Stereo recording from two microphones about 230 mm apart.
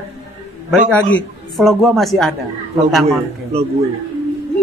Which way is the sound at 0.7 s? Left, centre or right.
Centre.